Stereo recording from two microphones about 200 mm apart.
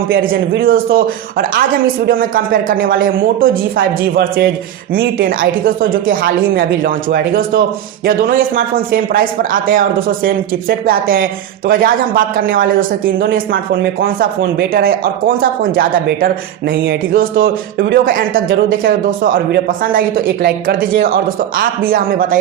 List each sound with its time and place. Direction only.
0.1 s speech: 45° right (ahead or behind)